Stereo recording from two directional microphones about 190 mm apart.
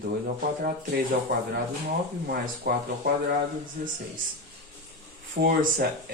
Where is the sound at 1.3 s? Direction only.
50° right (ahead or behind).